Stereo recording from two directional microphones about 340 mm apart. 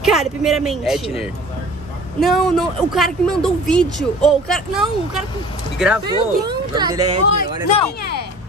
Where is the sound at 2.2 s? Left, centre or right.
Centre.